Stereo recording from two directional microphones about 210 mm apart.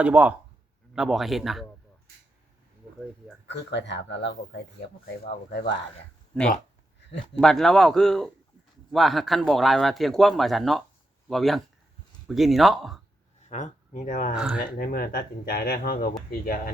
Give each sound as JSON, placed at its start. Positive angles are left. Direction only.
{"t": 0.0, "sound": "speech", "side_deg": -5}
{"t": 3.4, "sound": "speech", "side_deg": 55}
{"t": 6.3, "sound": "speech", "side_deg": 5}
{"t": 13.5, "sound": "speech", "side_deg": 35}
{"t": 14.3, "sound": "speech", "side_deg": -5}
{"t": 14.8, "sound": "speech", "side_deg": 45}